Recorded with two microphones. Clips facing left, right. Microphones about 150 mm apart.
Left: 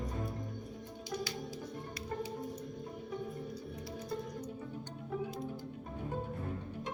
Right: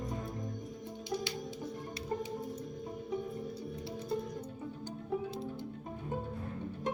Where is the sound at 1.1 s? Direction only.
25° right (ahead or behind).